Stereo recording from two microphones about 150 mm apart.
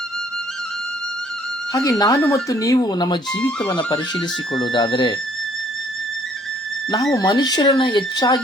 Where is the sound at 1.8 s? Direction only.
25° left (ahead or behind).